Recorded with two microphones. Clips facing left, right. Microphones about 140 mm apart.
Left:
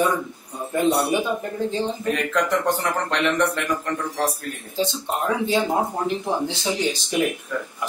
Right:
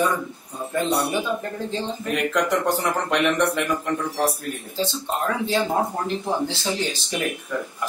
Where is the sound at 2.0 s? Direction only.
10° right (ahead or behind).